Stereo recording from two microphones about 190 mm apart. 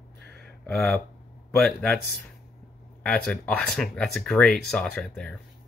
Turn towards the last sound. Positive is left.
turn(degrees=5)  # may be behind; listen again after turning